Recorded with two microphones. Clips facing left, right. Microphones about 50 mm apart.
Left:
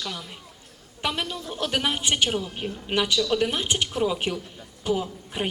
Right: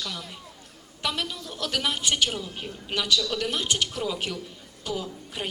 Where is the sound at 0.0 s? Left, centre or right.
Centre.